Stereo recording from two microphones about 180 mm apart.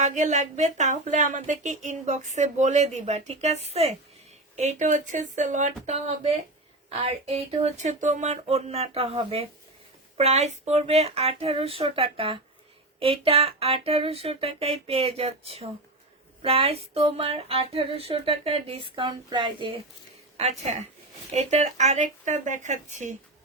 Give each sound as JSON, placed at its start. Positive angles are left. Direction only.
{"t": 0.0, "sound": "speech", "side_deg": -40}
{"t": 20.3, "sound": "speech", "side_deg": -35}